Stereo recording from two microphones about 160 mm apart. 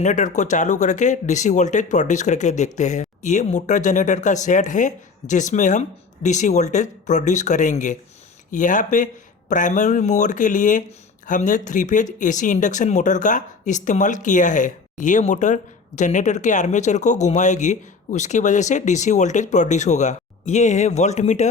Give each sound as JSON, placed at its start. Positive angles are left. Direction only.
{"t": 0.0, "sound": "speech", "side_deg": 50}